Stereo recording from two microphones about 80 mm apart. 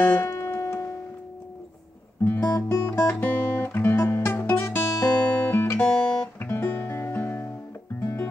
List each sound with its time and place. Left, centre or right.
0.2 s music: left
2.2 s guitar: left
5.8 s guitar: centre
6.4 s music: left